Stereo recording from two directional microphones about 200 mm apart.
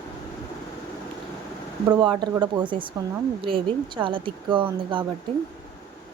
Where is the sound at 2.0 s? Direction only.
20° right (ahead or behind).